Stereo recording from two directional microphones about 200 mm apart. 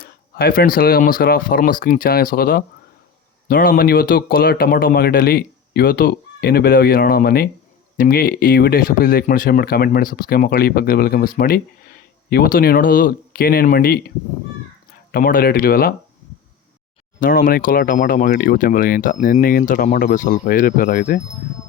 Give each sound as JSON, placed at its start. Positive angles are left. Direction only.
{"t": 0.0, "sound": "speech", "side_deg": 50}
{"t": 15.1, "sound": "speech", "side_deg": 45}
{"t": 17.2, "sound": "speech", "side_deg": 45}